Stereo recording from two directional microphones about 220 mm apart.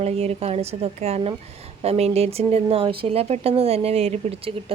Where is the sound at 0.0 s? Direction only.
30° right (ahead or behind).